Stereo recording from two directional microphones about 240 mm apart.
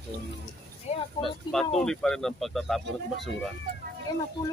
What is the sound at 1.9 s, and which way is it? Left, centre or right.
Speech, centre.